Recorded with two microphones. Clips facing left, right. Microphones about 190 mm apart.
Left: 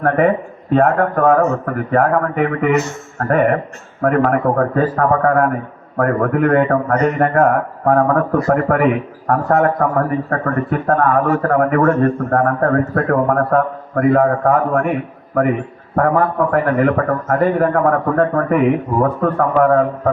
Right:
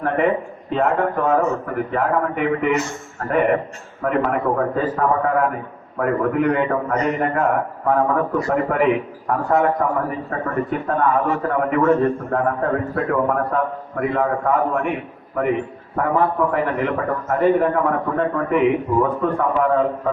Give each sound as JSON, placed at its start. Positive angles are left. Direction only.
{"t": 0.0, "sound": "a man's voice", "side_deg": 50}
{"t": 16.0, "sound": "a man's voice", "side_deg": 50}